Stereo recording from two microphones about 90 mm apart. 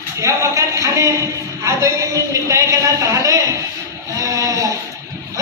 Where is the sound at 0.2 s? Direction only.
35° right (ahead or behind).